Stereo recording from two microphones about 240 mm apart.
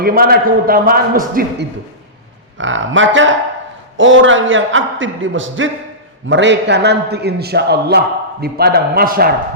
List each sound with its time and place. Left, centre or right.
0.0 s a man's voice: right
2.6 s a man's voice: right